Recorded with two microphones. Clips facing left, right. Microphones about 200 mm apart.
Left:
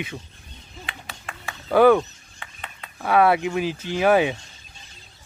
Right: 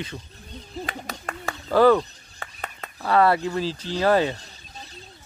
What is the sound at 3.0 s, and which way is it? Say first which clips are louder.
Speech: left 1 dB; 10° left (ahead or behind).